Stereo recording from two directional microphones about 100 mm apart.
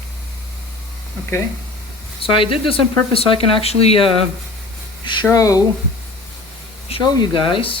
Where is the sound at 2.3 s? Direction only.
65° left (ahead or behind).